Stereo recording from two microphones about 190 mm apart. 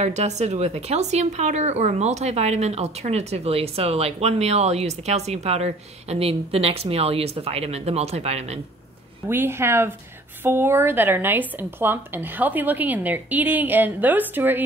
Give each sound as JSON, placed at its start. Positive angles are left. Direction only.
{"t": 0.0, "sound": "speech", "side_deg": -35}
{"t": 9.3, "sound": "speech", "side_deg": -10}